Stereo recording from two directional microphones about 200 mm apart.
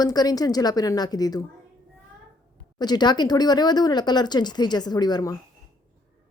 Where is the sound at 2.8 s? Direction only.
20° left (ahead or behind).